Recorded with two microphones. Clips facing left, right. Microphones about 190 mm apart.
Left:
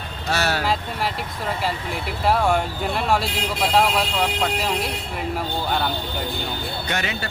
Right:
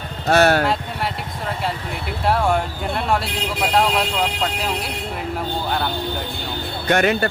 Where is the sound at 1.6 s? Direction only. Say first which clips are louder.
Even; centre (ahead or behind).